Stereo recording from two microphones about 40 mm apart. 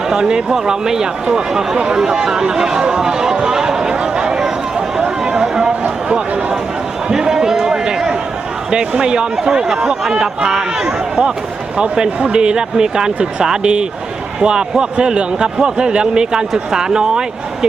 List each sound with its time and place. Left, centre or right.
0.1 s speech: centre
6.1 s a sound: right
7.1 s run: centre
8.7 s a man's voice: right